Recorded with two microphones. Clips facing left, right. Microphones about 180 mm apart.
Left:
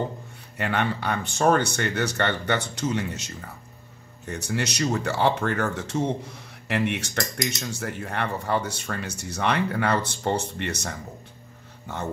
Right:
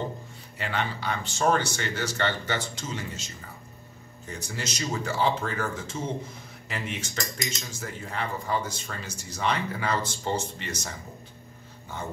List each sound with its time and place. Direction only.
0.6 s speech: 55° left (ahead or behind)